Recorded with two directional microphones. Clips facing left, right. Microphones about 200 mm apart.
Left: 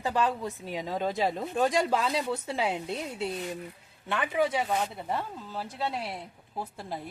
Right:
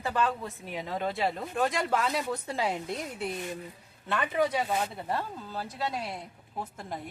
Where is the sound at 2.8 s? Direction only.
25° left (ahead or behind).